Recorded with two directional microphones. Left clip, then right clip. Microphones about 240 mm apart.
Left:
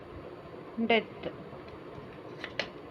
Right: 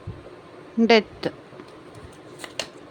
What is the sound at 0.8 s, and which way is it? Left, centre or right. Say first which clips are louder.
Speech: right 10 dB; right.